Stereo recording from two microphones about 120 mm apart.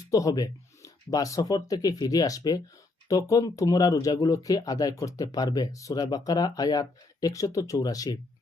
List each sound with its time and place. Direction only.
0.1 s speech: 30° left (ahead or behind)